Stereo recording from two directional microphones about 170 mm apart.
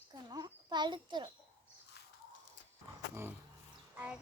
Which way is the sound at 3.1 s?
15° right (ahead or behind).